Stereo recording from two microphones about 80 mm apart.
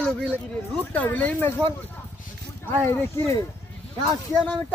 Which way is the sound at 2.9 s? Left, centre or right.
Left.